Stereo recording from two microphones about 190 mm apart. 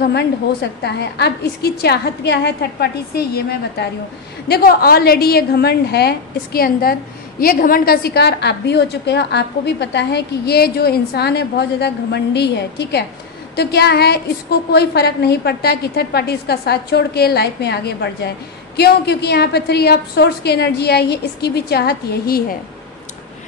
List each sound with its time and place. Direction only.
0.1 s a woman's voice: 60° left (ahead or behind)